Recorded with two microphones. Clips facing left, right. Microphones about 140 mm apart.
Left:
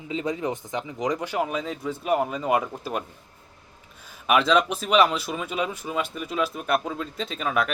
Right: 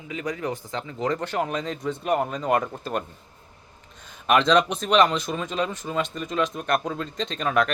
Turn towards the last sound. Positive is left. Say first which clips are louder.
# right 2 dB
turn(degrees=5)  # may be behind; listen again after turning